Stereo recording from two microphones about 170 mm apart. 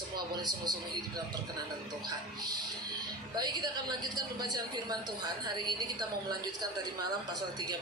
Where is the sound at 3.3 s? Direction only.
25° right (ahead or behind).